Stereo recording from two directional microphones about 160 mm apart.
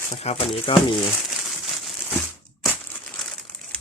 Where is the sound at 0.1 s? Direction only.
40° left (ahead or behind).